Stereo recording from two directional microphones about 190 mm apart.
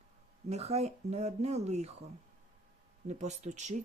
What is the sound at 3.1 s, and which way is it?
Speech, 35° right (ahead or behind).